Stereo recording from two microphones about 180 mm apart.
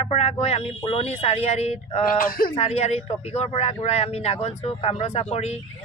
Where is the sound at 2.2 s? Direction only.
55° left (ahead or behind).